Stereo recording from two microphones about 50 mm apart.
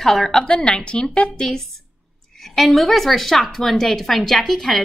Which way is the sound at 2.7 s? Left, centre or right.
Centre.